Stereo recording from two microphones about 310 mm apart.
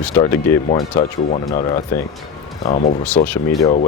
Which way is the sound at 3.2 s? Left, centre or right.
Centre.